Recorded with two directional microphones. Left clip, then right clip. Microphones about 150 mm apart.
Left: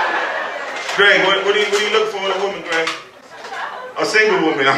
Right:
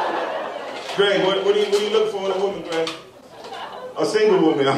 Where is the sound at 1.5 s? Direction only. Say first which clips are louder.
Left 3 dB; centre (ahead or behind).